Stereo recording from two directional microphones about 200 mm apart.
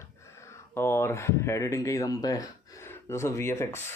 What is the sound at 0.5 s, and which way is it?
Speech, 10° left (ahead or behind).